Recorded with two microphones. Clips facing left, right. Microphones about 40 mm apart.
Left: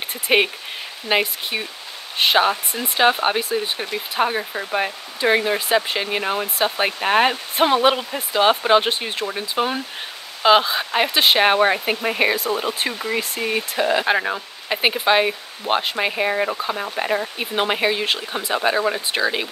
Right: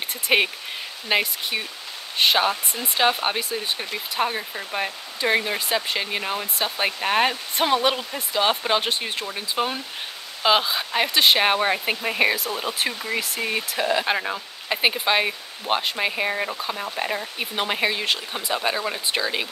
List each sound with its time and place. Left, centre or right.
0.3 s speech: centre
2.5 s speech: left
3.0 s speech: centre